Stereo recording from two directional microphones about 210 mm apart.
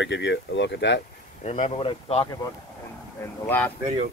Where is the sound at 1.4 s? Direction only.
35° left (ahead or behind).